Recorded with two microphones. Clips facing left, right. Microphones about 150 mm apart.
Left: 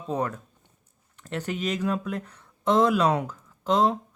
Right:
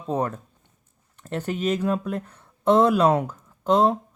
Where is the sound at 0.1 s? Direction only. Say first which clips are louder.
Right 3 dB; 45° right (ahead or behind).